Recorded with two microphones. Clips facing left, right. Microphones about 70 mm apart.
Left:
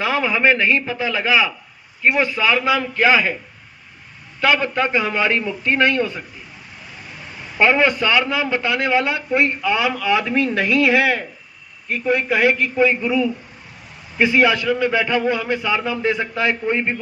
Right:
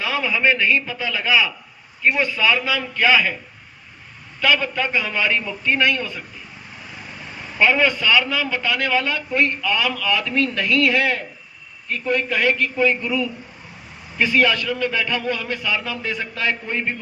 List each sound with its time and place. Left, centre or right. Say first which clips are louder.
0.0 s a man's voice: left 3 dB; left
4.4 s a man's voice: left 2 dB; left
7.6 s a man's voice: left 2 dB; left